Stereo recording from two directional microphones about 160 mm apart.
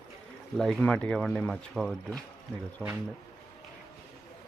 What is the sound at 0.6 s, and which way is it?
Speech, 5° left (ahead or behind).